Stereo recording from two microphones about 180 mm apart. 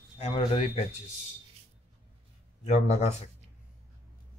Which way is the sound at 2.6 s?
35° left (ahead or behind).